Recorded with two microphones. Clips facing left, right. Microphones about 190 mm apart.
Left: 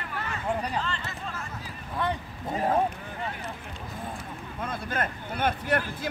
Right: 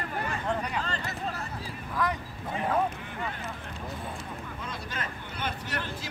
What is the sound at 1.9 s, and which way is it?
Speech, 30° left (ahead or behind).